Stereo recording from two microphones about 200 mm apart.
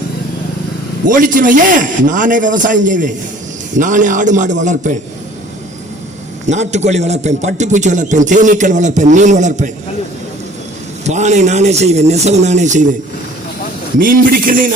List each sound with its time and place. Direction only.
1.0 s a man's voice: 40° right (ahead or behind)
6.4 s a man's voice: 35° right (ahead or behind)
11.0 s a man's voice: 35° right (ahead or behind)
14.0 s a man's voice: 45° right (ahead or behind)